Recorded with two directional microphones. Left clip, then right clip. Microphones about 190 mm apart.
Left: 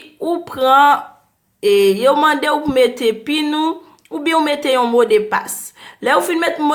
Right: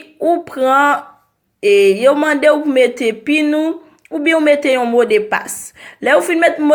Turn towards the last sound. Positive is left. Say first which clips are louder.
# right 5 dB
turn(degrees=-5)  # may be behind; listen again after turning